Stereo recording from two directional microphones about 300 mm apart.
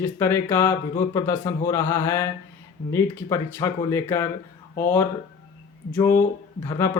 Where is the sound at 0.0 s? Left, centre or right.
Centre.